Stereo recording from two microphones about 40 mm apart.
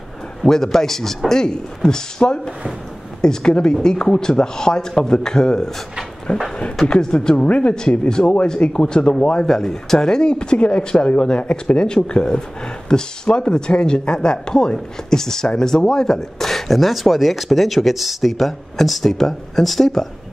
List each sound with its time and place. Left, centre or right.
0.4 s speech: centre; by 7.7 s left
8.1 s speech: centre
9.5 s speech: centre